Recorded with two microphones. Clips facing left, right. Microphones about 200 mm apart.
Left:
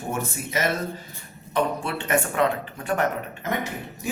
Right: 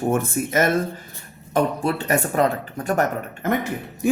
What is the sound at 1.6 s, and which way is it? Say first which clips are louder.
Speech: right 4 dB; 40° right (ahead or behind).